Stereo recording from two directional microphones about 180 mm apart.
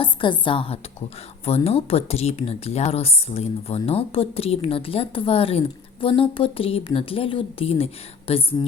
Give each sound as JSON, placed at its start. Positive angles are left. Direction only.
{"t": 0.0, "sound": "a woman's voice", "side_deg": 25}